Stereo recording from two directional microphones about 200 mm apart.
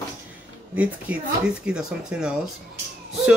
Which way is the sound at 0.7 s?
5° right (ahead or behind).